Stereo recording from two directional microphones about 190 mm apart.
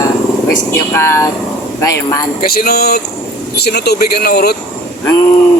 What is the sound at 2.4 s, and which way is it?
Speech, 55° left (ahead or behind).